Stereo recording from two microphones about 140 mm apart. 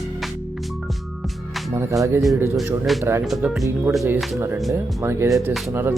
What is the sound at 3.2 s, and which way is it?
Music, 5° right (ahead or behind).